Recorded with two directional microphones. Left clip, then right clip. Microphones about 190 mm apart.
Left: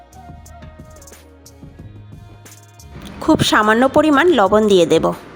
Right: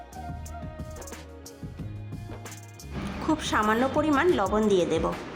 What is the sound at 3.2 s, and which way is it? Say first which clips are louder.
Speech: left 12 dB; 45° left (ahead or behind).